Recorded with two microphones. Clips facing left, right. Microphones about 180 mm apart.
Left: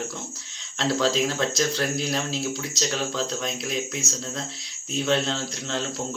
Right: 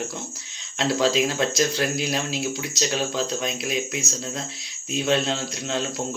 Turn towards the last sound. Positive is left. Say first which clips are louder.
# right 2 dB
turn(degrees=-15)  # may be behind; listen again after turning